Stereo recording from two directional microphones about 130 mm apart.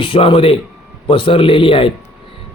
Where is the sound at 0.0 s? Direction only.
45° left (ahead or behind).